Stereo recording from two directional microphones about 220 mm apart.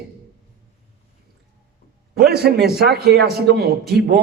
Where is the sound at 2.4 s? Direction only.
45° right (ahead or behind).